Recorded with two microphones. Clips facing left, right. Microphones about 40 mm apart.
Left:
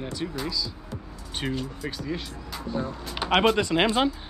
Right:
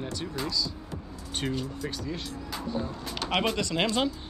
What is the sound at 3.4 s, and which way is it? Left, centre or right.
Speech, left.